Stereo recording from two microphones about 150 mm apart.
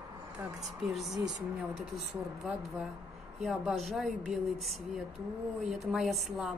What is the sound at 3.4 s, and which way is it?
Speech, centre (ahead or behind).